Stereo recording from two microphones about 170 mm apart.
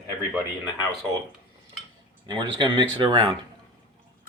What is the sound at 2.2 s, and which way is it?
Speech, 25° right (ahead or behind).